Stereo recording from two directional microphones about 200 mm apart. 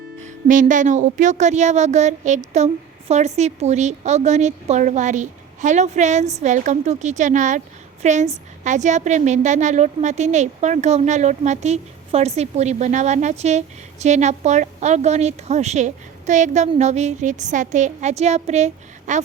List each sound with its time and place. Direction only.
0.2 s a woman's voice: 40° right (ahead or behind)